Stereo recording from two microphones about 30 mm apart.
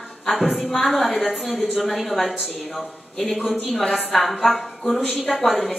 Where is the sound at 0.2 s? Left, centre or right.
Centre.